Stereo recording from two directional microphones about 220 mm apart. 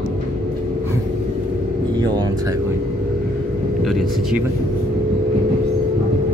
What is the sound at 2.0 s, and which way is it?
Speech, 20° right (ahead or behind).